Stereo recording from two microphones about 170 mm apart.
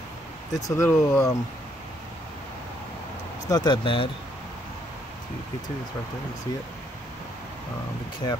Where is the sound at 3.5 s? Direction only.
25° left (ahead or behind).